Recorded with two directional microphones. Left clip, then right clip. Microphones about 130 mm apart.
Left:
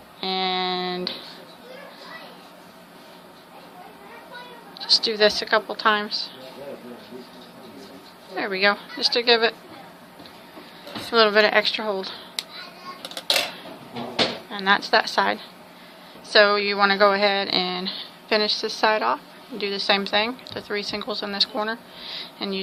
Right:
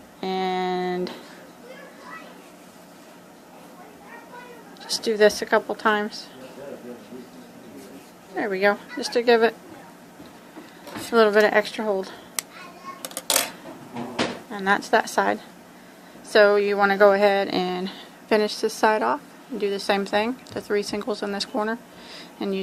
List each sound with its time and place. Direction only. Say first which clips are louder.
0.2 s a sound: left 1 dB; 50° right (ahead or behind)
5.0 s a woman's voice: right 1 dB; 55° right (ahead or behind)
8.4 s a woman's voice: even; 45° right (ahead or behind)
11.1 s speech: even; 50° right (ahead or behind)
14.5 s speech: left 1 dB; 55° right (ahead or behind)
21.5 s a woman's voice: right 1 dB; 55° right (ahead or behind)